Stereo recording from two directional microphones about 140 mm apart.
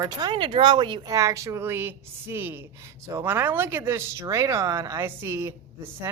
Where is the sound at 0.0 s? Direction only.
30° right (ahead or behind).